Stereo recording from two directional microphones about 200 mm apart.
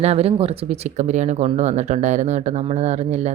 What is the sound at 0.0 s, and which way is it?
Speech, 30° right (ahead or behind).